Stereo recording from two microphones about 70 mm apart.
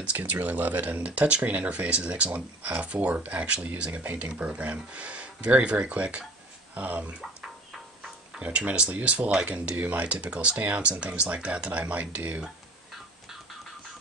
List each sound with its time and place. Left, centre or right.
0.0 s speech: right
8.4 s speech: centre